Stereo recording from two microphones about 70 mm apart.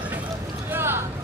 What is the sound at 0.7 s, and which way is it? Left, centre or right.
Vehicle, right.